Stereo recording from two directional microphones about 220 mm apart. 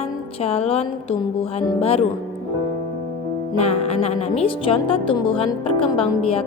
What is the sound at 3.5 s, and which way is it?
Music, 30° left (ahead or behind).